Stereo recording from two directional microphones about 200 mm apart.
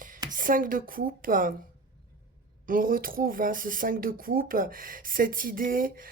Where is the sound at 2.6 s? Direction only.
45° right (ahead or behind).